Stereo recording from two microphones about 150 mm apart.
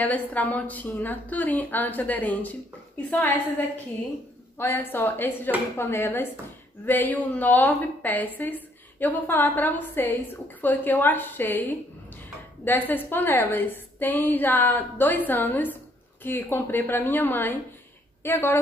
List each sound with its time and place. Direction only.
0.0 s a woman's voice: 10° left (ahead or behind)